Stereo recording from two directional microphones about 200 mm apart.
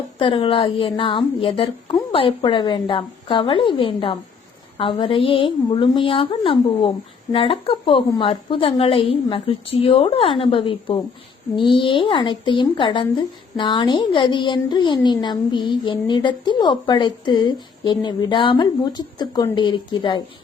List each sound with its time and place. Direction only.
0.2 s speech: 25° left (ahead or behind)